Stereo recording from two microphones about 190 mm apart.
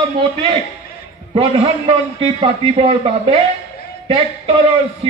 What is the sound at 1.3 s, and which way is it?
A man's voice, 30° right (ahead or behind).